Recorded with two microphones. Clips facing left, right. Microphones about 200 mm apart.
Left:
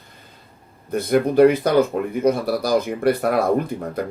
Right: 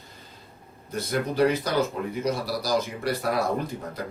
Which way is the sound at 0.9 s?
55° left (ahead or behind).